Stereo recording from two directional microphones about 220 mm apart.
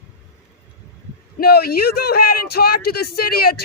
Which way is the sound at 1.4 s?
45° left (ahead or behind).